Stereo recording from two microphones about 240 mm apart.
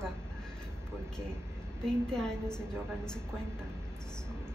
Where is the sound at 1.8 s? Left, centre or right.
Centre.